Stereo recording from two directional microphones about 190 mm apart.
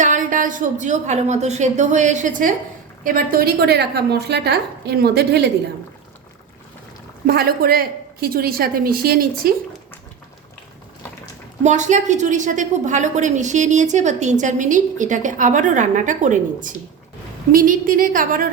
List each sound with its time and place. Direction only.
0.0 s a woman's voice: 40° right (ahead or behind); by 5.5 s 60° right (ahead or behind)
7.3 s a woman's voice: 55° right (ahead or behind)
11.6 s a woman's voice: 40° right (ahead or behind)